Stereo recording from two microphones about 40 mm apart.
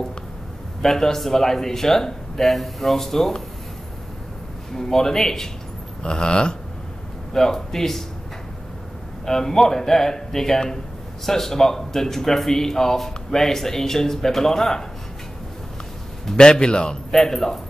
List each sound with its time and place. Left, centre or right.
0.8 s speech: centre
4.7 s a man's voice: centre
9.2 s speech: centre
16.3 s a man's voice: left
17.1 s speech: centre